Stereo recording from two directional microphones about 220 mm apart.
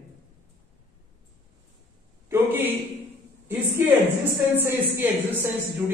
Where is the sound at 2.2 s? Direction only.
10° right (ahead or behind).